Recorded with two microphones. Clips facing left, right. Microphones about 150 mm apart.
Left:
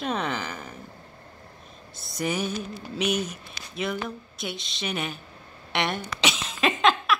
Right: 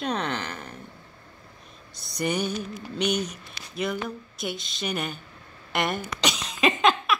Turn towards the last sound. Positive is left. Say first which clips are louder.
# even
turn(degrees=0)  # may be behind; listen again after turning